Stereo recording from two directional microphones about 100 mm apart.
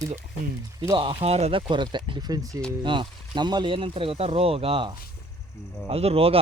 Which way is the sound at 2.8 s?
55° right (ahead or behind).